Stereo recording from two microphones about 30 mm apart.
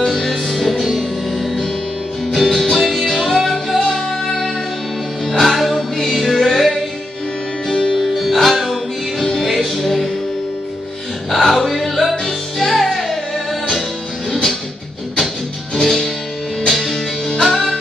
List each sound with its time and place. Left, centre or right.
0.0 s music: centre
2.3 s music: centre
3.8 s music: left
5.4 s music: centre
7.6 s music: left
8.2 s music: centre
9.2 s music: centre
9.5 s music: centre
11.2 s music: centre
15.7 s music: centre